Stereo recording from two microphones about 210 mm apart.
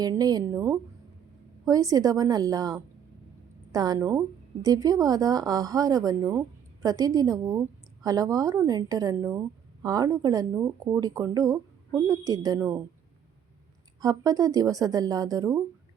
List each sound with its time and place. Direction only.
0.0 s speech: 20° right (ahead or behind)
14.0 s speech: 15° right (ahead or behind)